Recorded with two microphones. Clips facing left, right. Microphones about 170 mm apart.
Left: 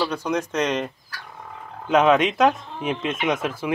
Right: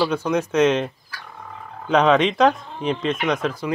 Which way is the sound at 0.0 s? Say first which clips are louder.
Right 3 dB; 5° right (ahead or behind).